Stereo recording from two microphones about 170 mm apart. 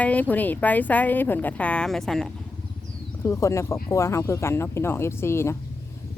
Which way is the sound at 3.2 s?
15° left (ahead or behind).